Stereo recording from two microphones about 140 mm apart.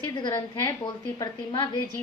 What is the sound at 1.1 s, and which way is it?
Speech, 30° left (ahead or behind).